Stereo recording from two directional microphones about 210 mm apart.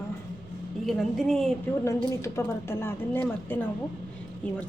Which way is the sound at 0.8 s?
Centre (ahead or behind).